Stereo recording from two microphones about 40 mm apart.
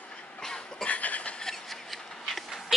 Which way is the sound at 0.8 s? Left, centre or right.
Left.